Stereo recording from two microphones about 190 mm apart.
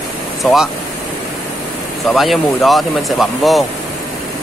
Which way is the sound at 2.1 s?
Centre (ahead or behind).